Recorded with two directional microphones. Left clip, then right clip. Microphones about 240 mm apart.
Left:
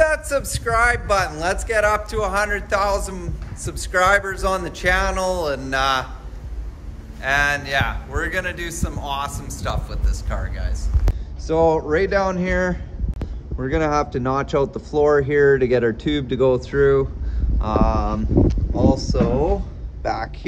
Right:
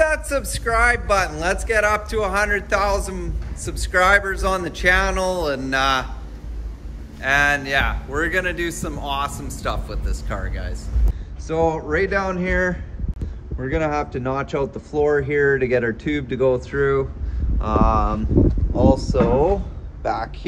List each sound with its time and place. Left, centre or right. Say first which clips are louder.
0.0 s a man's voice: left 1 dB; centre
7.2 s a man's voice: right 1 dB; centre
19.1 s a man's voice: right 3 dB; centre